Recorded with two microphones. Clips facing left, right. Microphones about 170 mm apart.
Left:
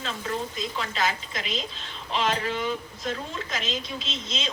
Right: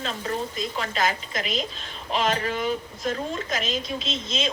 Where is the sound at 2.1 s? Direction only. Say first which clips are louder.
Right 2 dB; 45° right (ahead or behind).